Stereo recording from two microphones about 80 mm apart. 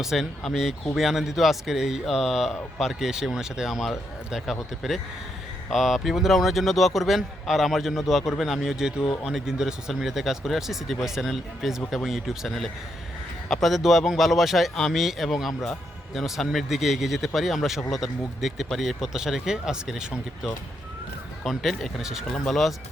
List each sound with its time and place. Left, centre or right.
0.0 s speech: centre